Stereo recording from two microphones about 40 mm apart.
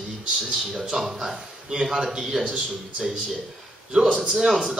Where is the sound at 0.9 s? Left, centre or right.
Centre.